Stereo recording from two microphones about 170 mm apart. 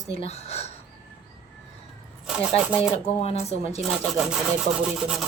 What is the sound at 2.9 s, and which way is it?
Speech, 35° left (ahead or behind).